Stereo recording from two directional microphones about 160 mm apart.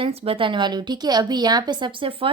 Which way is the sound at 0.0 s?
40° right (ahead or behind).